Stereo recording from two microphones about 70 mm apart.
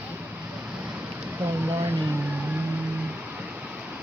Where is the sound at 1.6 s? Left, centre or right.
Right.